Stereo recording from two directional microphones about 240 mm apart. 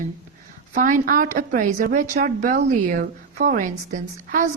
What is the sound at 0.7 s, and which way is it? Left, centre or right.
A woman's voice, right.